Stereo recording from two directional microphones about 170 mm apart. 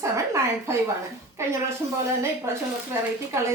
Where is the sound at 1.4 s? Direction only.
15° right (ahead or behind).